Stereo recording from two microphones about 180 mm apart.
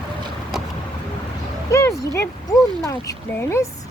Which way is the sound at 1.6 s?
15° left (ahead or behind).